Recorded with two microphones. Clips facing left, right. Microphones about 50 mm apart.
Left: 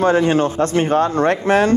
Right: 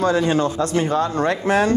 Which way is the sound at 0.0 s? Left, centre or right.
Left.